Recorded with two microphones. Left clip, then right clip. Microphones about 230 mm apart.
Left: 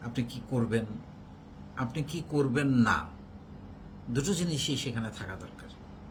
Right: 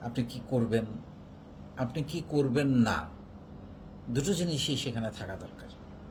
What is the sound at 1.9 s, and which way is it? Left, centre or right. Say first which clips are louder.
Speech: right 1 dB; centre.